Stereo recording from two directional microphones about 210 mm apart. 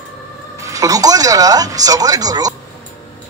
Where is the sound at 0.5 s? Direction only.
15° right (ahead or behind).